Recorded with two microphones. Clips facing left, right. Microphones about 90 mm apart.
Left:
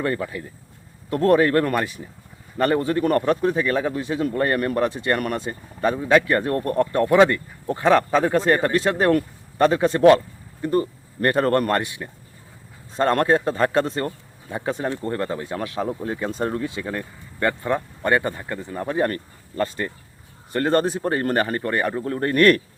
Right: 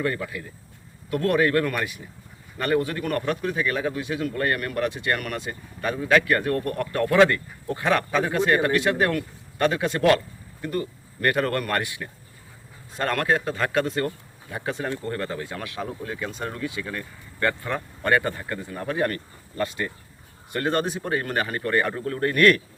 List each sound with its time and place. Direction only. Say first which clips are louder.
0.0 s speech: left 3 dB; 30° left (ahead or behind)
11.8 s speech: left 1 dB; 25° left (ahead or behind)
21.7 s speech: left 1 dB; 20° left (ahead or behind); by 22.6 s 40° left (ahead or behind)